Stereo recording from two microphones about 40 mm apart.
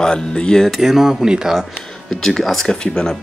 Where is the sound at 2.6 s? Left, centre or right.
Centre.